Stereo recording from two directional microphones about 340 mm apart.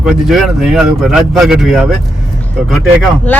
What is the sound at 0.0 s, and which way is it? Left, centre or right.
Speech, centre.